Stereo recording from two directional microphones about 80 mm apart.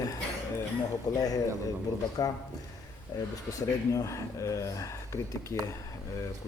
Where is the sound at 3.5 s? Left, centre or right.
Left.